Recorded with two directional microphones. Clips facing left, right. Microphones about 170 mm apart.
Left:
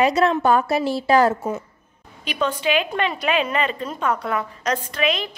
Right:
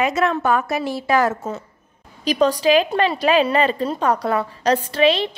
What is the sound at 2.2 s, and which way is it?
A woman's voice, 35° right (ahead or behind).